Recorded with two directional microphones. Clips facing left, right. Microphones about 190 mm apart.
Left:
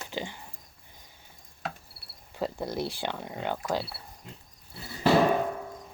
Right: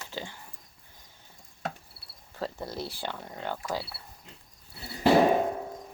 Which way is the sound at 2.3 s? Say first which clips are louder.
Left 4 dB; 15° left (ahead or behind).